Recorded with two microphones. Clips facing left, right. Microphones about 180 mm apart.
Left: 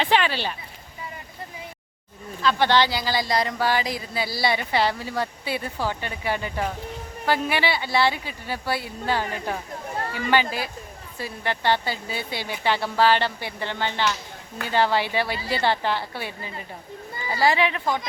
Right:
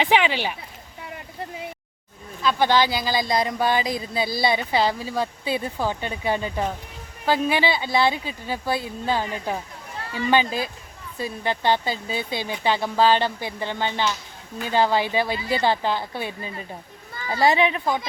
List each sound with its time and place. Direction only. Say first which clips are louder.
0.0 s speech: right 2 dB; 15° right (ahead or behind)
2.4 s speech: even; 15° right (ahead or behind)